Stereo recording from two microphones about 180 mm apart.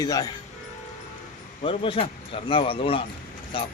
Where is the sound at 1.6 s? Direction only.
30° left (ahead or behind).